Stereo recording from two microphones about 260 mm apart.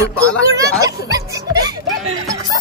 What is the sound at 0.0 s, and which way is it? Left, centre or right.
Music, centre.